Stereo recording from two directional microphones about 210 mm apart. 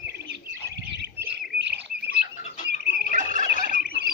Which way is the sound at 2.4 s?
35° left (ahead or behind).